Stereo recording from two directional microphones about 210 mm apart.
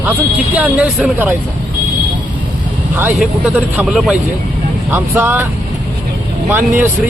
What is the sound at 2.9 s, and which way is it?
Speech, 5° right (ahead or behind).